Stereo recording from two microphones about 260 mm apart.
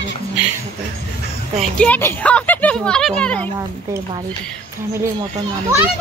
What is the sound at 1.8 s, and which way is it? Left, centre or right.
Speech, centre.